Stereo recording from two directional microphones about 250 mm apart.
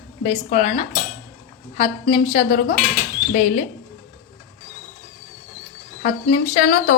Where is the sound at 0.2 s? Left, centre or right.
Left.